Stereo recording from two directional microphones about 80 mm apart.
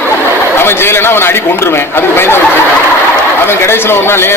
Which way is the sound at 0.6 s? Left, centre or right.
Left.